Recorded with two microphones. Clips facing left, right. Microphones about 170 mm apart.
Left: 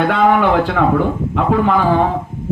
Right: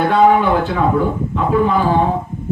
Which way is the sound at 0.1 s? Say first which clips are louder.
Right 1 dB; 75° left (ahead or behind).